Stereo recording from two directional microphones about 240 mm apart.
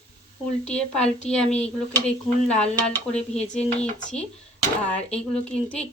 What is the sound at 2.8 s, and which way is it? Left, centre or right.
A woman's voice, centre.